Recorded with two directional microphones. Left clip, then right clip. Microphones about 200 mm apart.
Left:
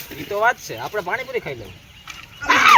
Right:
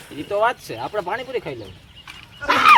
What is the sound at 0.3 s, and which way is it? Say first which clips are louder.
Speech: left 1 dB; 60° right (ahead or behind).